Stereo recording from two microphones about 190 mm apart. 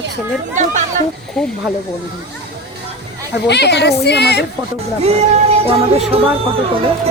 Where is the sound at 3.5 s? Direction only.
60° left (ahead or behind).